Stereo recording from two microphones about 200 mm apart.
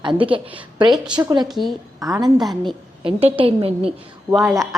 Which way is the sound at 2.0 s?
15° right (ahead or behind).